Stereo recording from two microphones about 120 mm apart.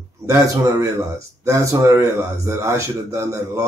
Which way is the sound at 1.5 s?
25° right (ahead or behind).